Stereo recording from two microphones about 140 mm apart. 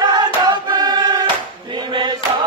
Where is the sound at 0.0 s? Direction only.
30° right (ahead or behind).